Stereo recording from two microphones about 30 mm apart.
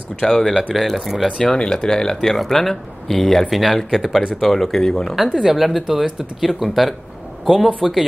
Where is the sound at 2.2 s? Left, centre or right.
Centre.